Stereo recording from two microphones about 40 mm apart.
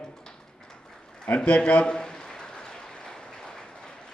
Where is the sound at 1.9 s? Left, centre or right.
Centre.